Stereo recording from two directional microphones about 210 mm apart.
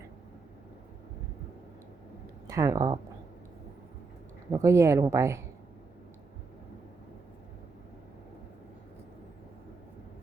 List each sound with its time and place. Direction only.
2.5 s speech: 15° right (ahead or behind)
4.5 s speech: 15° right (ahead or behind)